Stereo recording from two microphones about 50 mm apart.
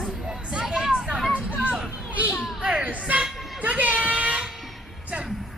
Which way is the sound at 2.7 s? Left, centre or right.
Centre.